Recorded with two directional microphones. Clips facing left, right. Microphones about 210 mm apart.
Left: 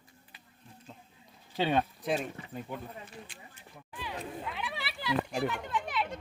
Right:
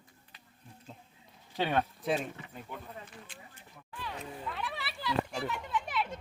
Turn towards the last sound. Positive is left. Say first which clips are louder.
# left 1 dB
turn(degrees=-5)  # may be behind; listen again after turning